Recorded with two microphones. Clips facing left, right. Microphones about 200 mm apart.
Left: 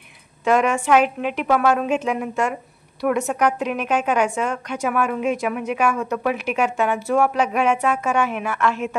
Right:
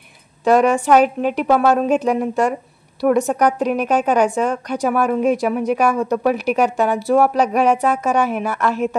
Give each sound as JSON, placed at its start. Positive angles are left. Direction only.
{"t": 0.5, "sound": "a woman's voice", "side_deg": -35}